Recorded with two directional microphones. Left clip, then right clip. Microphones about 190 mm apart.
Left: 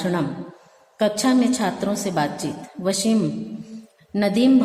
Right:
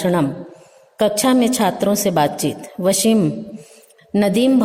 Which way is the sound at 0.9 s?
45° right (ahead or behind).